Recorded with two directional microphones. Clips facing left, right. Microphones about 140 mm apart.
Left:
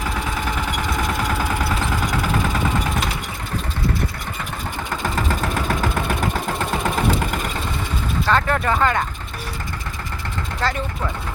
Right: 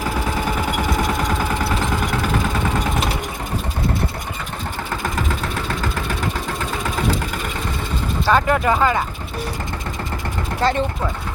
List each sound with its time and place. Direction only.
8.3 s speech: 10° right (ahead or behind)
10.6 s speech: 15° right (ahead or behind)